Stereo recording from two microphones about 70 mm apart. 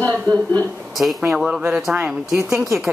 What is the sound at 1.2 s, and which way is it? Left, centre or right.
Speech, centre.